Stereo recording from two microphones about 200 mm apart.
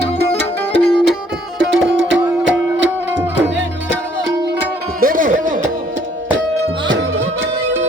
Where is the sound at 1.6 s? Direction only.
65° right (ahead or behind).